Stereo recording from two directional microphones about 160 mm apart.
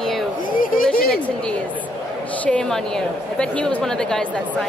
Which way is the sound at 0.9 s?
70° left (ahead or behind).